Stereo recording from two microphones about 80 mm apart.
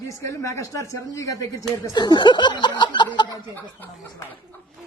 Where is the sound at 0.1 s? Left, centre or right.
Left.